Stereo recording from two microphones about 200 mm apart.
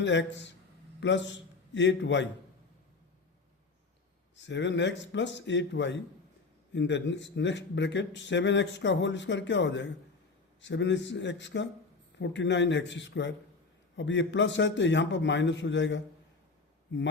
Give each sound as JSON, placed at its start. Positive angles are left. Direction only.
{"t": 0.0, "sound": "a man's voice", "side_deg": 65}
{"t": 4.4, "sound": "speech", "side_deg": 65}